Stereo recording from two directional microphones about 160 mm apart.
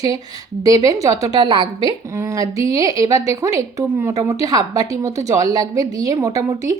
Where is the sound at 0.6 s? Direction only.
20° right (ahead or behind).